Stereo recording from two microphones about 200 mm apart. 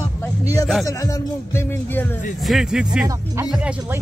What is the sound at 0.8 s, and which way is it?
Speech, 15° left (ahead or behind).